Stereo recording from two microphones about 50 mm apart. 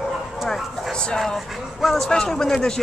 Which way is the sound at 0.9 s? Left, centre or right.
Centre.